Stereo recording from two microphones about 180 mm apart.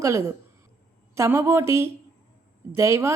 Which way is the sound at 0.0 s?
15° right (ahead or behind).